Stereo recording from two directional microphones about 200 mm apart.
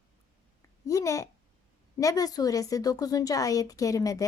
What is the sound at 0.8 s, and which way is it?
A woman's voice, 15° left (ahead or behind).